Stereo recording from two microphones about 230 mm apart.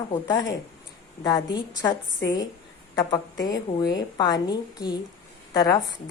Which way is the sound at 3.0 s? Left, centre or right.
Centre.